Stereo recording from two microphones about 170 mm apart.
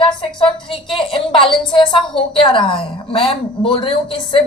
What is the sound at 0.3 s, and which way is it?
A woman's voice, 30° left (ahead or behind).